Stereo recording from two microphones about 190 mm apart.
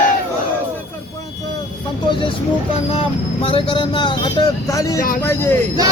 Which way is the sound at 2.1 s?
25° left (ahead or behind).